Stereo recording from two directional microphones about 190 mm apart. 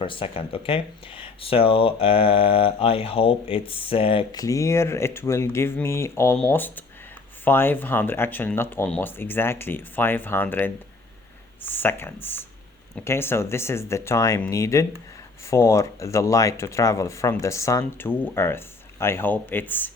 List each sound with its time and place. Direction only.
0.0 s speech: 25° left (ahead or behind); by 19.9 s 10° left (ahead or behind)